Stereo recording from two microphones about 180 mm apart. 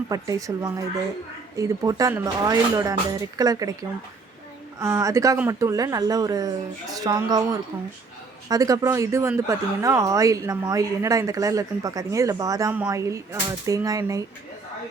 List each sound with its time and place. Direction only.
0.1 s speech: 20° right (ahead or behind)